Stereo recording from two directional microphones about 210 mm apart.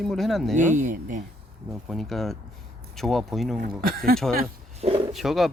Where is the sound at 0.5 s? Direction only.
35° right (ahead or behind).